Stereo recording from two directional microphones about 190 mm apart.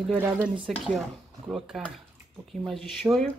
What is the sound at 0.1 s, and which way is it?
Speech, 10° right (ahead or behind).